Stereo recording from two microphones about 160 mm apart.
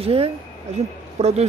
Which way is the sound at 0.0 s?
35° right (ahead or behind).